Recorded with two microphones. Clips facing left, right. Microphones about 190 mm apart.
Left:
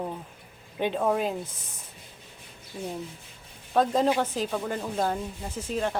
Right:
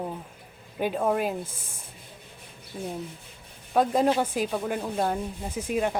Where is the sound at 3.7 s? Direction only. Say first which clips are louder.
Right 1 dB; 10° right (ahead or behind).